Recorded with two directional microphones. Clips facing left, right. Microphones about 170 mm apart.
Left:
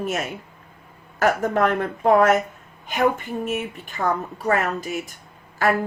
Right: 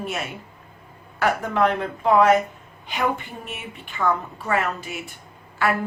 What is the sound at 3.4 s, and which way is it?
Speech, 40° left (ahead or behind).